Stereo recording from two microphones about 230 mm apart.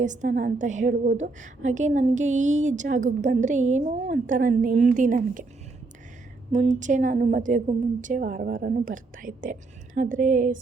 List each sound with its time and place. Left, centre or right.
0.0 s a woman's voice: right
6.5 s a woman's voice: right